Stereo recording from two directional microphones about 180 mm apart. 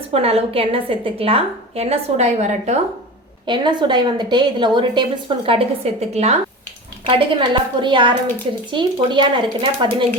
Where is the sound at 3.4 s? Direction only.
25° right (ahead or behind).